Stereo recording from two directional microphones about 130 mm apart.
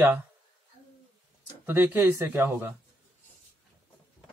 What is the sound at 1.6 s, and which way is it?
Speech, 15° right (ahead or behind).